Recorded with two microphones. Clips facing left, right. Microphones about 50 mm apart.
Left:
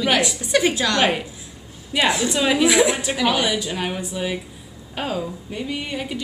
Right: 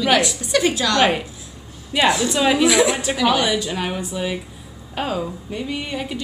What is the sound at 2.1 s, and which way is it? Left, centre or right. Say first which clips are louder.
Speech: right 3 dB; centre.